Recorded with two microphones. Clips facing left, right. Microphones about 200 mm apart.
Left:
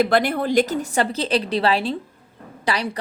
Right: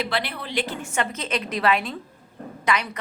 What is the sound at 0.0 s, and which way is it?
A woman's voice, 45° left (ahead or behind).